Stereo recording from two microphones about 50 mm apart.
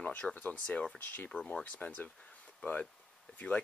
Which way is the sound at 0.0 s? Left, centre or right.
Left.